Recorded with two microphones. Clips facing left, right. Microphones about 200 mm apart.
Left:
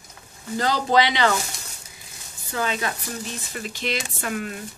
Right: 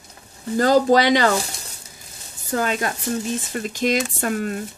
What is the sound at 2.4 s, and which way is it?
Speech, 45° right (ahead or behind).